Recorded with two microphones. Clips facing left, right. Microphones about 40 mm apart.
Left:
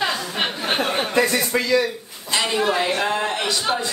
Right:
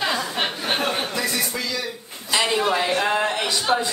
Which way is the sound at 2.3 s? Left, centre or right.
Centre.